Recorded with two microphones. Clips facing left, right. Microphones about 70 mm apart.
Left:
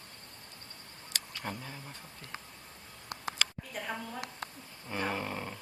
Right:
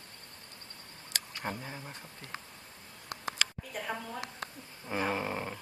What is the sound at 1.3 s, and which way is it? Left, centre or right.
Speech, centre.